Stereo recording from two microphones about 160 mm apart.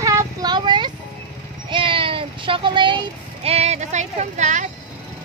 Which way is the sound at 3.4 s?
40° right (ahead or behind).